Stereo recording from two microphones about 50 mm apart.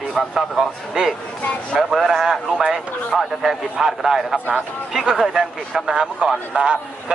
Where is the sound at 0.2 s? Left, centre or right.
Centre.